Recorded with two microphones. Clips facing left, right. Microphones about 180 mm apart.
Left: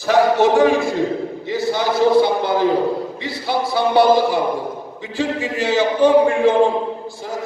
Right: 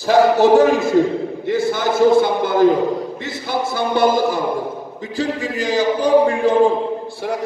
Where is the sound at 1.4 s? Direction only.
50° right (ahead or behind).